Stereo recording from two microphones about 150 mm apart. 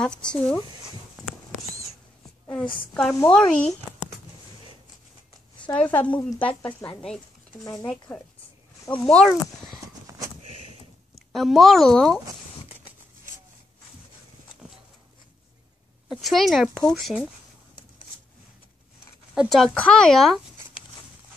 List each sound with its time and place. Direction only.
0.0 s speech: 5° left (ahead or behind)
2.5 s speech: 5° left (ahead or behind)
5.8 s speech: 10° left (ahead or behind)
10.4 s a sound: 45° right (ahead or behind)
11.3 s speech: centre (ahead or behind)
16.1 s speech: centre (ahead or behind)
19.3 s speech: 5° right (ahead or behind)